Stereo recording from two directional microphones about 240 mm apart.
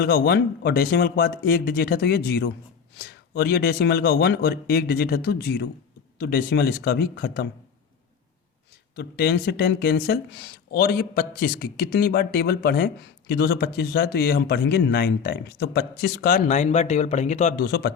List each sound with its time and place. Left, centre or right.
0.0 s speech: left
9.0 s speech: left
17.6 s speech: left